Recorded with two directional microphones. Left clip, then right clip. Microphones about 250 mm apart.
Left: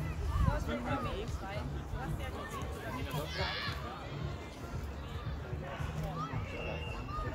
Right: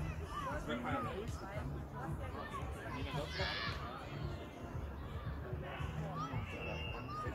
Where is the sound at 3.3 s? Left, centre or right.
Centre.